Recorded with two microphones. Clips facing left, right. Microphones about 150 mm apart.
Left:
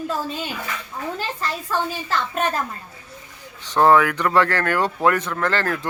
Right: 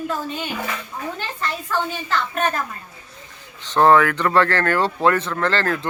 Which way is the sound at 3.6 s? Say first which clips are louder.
Right 1 dB; 10° left (ahead or behind).